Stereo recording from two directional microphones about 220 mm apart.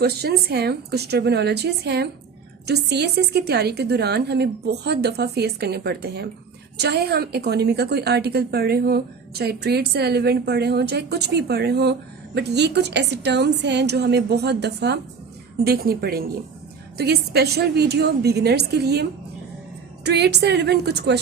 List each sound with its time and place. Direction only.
0.0 s a woman's voice: 45° right (ahead or behind)
20.1 s a woman's voice: 50° right (ahead or behind)